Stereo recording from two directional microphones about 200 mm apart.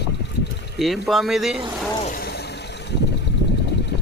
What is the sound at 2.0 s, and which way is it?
Vehicle, 45° left (ahead or behind).